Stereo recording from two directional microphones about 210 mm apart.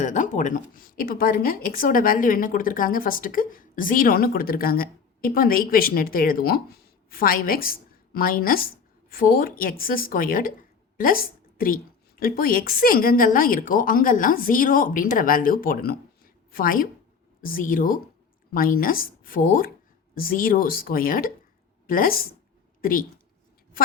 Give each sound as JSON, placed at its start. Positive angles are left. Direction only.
{"t": 0.0, "sound": "a woman's voice", "side_deg": 35}